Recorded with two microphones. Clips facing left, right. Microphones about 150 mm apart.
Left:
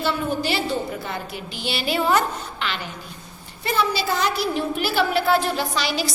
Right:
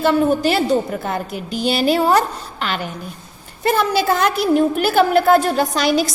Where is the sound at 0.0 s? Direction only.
50° right (ahead or behind).